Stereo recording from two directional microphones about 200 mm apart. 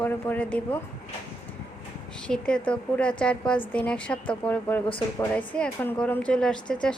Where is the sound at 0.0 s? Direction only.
10° left (ahead or behind).